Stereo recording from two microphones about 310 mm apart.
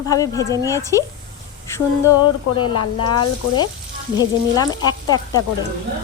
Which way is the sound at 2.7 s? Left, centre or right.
Left.